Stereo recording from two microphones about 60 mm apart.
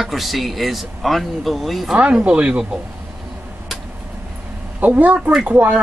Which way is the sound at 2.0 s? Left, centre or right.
Right.